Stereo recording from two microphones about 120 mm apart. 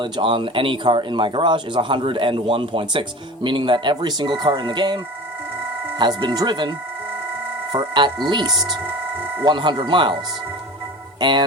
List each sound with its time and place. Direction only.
0.0 s speech: 45° right (ahead or behind)
6.0 s speech: 40° right (ahead or behind)
11.2 s speech: 40° right (ahead or behind)